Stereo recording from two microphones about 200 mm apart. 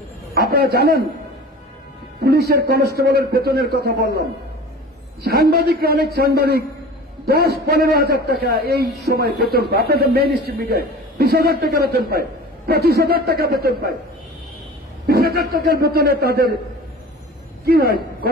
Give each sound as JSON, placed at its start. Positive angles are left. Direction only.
{"t": 0.3, "sound": "a man's voice", "side_deg": -50}
{"t": 2.2, "sound": "a man's voice", "side_deg": -50}
{"t": 5.2, "sound": "a man's voice", "side_deg": -50}
{"t": 15.0, "sound": "a man's voice", "side_deg": -50}
{"t": 17.6, "sound": "a man's voice", "side_deg": -50}